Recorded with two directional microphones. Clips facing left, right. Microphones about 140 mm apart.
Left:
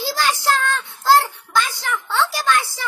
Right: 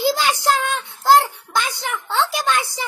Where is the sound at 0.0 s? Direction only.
15° right (ahead or behind).